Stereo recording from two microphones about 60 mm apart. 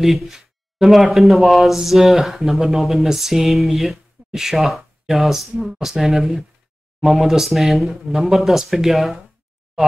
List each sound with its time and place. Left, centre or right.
0.0 s speech: centre